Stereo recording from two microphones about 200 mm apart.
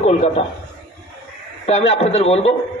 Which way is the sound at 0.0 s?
35° left (ahead or behind).